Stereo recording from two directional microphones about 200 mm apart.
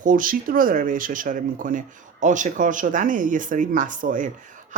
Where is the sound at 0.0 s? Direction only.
40° right (ahead or behind).